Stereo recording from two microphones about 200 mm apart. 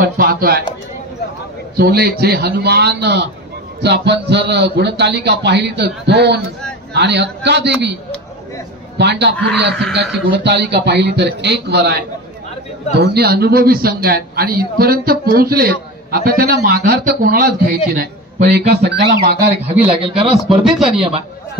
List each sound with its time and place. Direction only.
0.0 s a man's voice: 50° right (ahead or behind)
1.8 s a man's voice: 50° right (ahead or behind)
8.9 s a man's voice: 60° right (ahead or behind)
13.0 s a man's voice: 55° right (ahead or behind)
19.9 s speech: 25° right (ahead or behind)
20.6 s speech: centre (ahead or behind)